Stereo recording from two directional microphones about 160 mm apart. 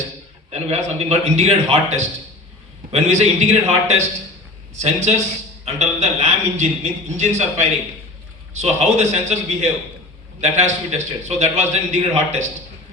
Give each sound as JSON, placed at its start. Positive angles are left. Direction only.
{"t": 0.7, "sound": "a man's voice", "side_deg": -40}